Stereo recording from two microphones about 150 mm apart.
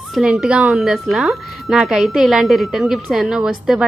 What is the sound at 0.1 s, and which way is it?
A woman's voice, centre (ahead or behind).